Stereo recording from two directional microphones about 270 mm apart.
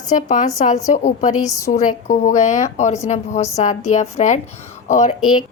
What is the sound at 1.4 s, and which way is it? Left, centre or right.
Speech, centre.